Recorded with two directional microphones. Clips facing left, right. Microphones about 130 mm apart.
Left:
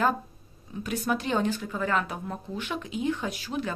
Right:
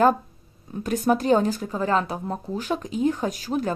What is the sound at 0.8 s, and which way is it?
A woman's voice, 40° right (ahead or behind).